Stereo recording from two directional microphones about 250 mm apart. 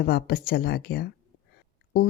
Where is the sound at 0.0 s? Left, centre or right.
Left.